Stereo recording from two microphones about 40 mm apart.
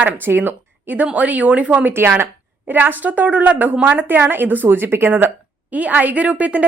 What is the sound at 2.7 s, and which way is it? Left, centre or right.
A woman's voice, right.